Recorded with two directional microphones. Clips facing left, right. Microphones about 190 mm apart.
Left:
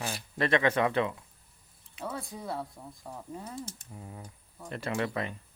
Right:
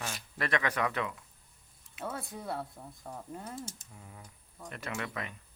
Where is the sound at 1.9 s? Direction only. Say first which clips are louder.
Left 1 dB; centre (ahead or behind).